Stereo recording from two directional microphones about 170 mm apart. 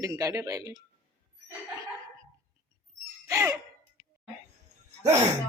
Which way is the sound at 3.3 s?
20° right (ahead or behind).